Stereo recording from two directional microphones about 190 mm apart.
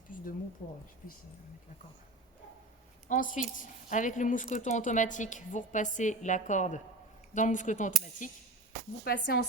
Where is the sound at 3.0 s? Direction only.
45° left (ahead or behind).